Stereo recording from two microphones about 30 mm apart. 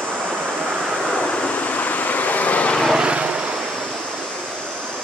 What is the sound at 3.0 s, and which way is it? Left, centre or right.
Vehicle, right.